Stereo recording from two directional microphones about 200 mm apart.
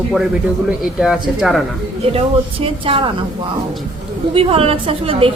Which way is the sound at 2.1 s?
30° right (ahead or behind).